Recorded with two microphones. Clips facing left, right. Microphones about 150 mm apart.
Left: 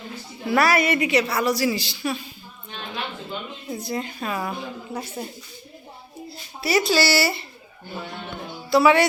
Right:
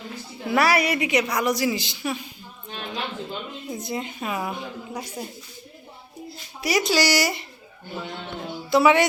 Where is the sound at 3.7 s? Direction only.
20° right (ahead or behind).